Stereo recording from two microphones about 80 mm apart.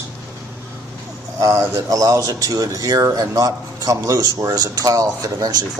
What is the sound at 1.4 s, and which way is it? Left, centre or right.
Speech, right.